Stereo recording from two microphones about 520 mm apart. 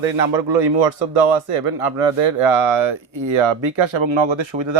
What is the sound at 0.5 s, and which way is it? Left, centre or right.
Speech, right.